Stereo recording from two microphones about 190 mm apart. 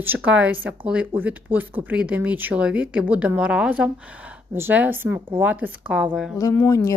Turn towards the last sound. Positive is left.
turn(degrees=15)  # may be behind; listen again after turning